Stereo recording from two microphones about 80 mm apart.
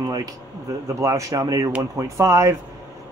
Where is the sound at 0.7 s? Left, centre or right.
Right.